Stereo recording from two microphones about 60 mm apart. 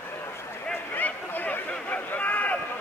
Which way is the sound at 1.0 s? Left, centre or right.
Left.